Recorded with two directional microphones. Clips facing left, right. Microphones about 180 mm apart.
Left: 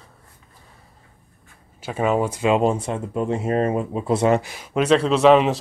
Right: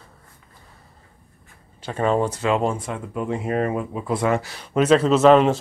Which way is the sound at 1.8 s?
10° left (ahead or behind).